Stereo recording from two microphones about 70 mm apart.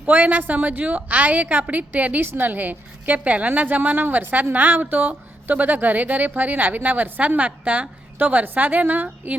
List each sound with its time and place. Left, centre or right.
0.0 s speech: right